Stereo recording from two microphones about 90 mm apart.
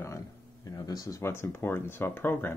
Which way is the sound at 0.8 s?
45° left (ahead or behind).